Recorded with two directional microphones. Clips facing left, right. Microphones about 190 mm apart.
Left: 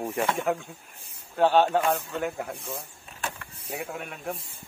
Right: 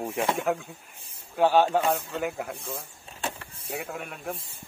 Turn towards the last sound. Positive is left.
turn(degrees=0)  # may be behind; listen again after turning